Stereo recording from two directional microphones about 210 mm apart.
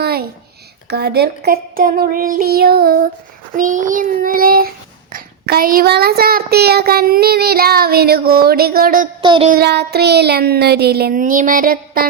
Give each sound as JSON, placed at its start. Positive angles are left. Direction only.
{"t": 0.0, "sound": "a sound", "side_deg": -50}
{"t": 0.9, "sound": "child singing", "side_deg": -50}
{"t": 9.2, "sound": "child singing", "side_deg": -20}
{"t": 9.5, "sound": "child singing", "side_deg": -50}